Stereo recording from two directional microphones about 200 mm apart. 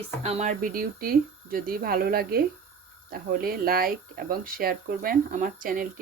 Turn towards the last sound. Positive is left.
turn(degrees=-45)  # may be behind; listen again after turning